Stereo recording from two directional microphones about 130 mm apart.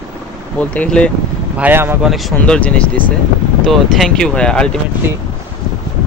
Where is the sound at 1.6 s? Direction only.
15° right (ahead or behind).